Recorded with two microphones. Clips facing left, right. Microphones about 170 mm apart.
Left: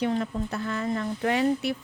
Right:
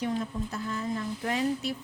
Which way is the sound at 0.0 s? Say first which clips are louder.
Left 4 dB; 70° left (ahead or behind).